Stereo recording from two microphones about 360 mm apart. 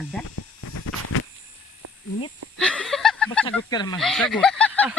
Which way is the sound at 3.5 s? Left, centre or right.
Centre.